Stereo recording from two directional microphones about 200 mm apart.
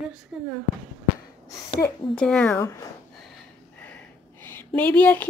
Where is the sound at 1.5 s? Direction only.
15° left (ahead or behind).